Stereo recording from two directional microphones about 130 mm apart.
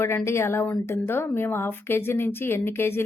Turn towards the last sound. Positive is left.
turn(degrees=20)  # may be behind; listen again after turning